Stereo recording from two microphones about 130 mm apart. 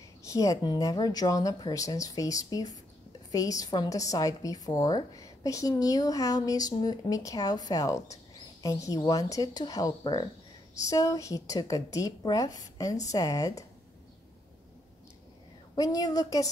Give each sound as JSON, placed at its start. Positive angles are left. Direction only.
{"t": 0.3, "sound": "a woman's voice", "side_deg": 25}
{"t": 15.7, "sound": "a woman's voice", "side_deg": 30}